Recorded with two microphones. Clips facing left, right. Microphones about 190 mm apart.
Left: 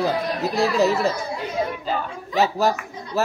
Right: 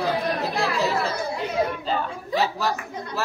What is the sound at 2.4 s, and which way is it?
Speech, 45° left (ahead or behind).